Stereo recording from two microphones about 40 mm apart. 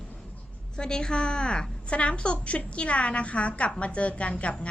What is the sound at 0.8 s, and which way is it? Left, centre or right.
A woman's voice, centre.